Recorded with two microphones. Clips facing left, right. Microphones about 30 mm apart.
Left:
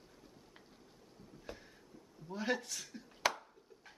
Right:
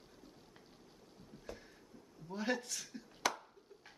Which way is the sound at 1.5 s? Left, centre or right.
Left.